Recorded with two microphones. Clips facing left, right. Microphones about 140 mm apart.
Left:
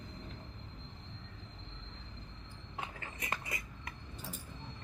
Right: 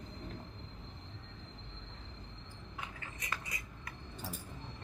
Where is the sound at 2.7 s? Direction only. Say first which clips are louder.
Left 4 dB; 25° left (ahead or behind).